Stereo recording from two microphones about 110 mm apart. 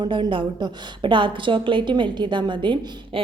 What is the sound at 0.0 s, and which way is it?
A woman's voice, 50° right (ahead or behind).